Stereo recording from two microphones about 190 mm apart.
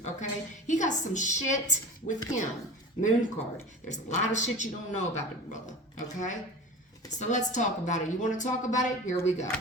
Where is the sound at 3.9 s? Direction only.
40° left (ahead or behind).